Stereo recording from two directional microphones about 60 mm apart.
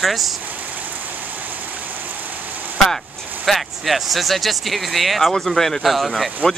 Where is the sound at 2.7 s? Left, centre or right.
Centre.